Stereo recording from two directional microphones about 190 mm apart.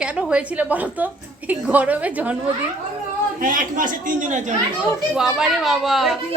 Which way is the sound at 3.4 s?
45° right (ahead or behind).